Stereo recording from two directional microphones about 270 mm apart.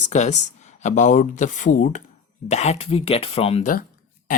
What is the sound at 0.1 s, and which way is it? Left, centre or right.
Speech, left.